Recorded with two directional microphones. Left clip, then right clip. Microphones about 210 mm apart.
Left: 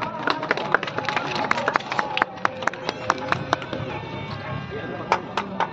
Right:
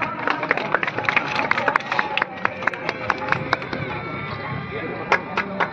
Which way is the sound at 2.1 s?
50° left (ahead or behind).